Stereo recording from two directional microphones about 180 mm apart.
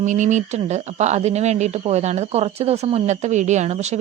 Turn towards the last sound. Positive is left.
turn(degrees=-40)  # may be behind; listen again after turning